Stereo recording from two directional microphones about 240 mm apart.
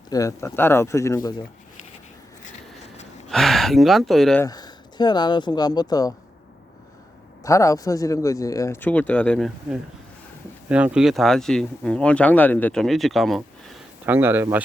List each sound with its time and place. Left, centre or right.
0.1 s speech: centre
3.2 s speech: centre
4.4 s speech: centre
7.4 s speech: centre